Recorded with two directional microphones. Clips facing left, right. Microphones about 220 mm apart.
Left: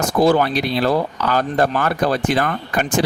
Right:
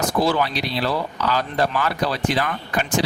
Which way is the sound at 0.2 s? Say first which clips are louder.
Left 7 dB; 50° left (ahead or behind).